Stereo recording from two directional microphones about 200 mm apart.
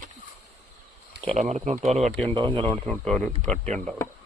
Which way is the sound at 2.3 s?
25° right (ahead or behind).